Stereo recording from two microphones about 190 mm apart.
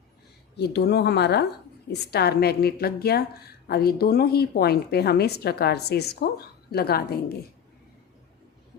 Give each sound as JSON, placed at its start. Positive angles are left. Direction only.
{"t": 0.5, "sound": "a woman's voice", "side_deg": 60}